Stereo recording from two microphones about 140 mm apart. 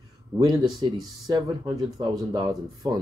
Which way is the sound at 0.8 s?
30° right (ahead or behind).